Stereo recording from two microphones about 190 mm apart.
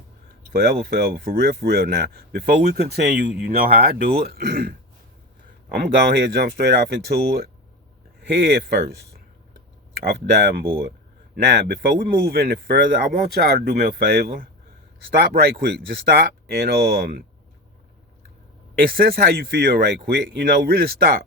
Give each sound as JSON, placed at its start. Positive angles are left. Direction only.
{"t": 0.5, "sound": "speech", "side_deg": -55}
{"t": 10.0, "sound": "speech", "side_deg": -55}
{"t": 18.8, "sound": "speech", "side_deg": -50}